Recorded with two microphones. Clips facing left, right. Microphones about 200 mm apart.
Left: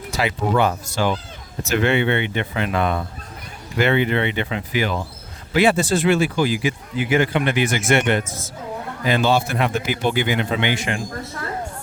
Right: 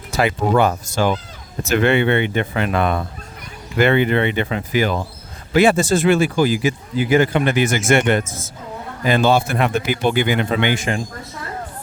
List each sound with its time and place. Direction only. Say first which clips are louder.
0.1 s speech: right 4 dB; 50° right (ahead or behind)